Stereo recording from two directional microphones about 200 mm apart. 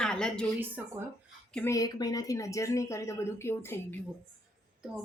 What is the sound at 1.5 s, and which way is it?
Speech, 15° left (ahead or behind).